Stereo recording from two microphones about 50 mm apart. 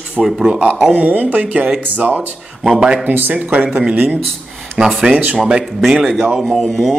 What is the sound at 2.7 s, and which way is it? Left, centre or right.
Speech, centre.